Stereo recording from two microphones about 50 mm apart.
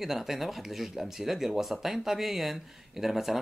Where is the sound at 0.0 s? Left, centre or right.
Centre.